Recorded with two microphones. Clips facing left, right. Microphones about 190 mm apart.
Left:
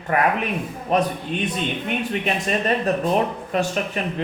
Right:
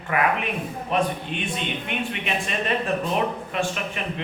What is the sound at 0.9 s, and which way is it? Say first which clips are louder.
A man's voice: left 3 dB; 40° left (ahead or behind).